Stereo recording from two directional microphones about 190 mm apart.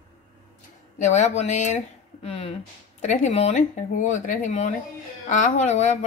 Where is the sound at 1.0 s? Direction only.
40° left (ahead or behind).